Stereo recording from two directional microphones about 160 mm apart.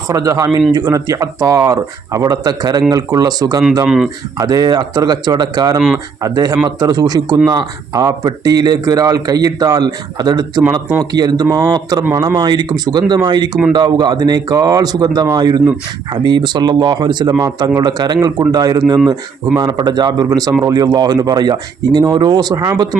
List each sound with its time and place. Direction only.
0.1 s speech: 20° right (ahead or behind)
3.8 s speech: 5° right (ahead or behind)
4.4 s speech: 25° right (ahead or behind)